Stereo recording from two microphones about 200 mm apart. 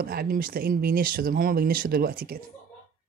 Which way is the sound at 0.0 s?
50° right (ahead or behind).